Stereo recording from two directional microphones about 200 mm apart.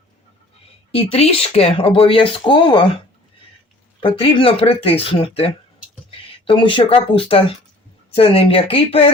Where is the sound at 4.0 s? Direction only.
25° left (ahead or behind).